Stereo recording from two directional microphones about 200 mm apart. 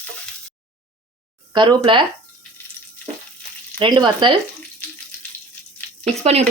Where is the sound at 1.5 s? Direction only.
20° right (ahead or behind).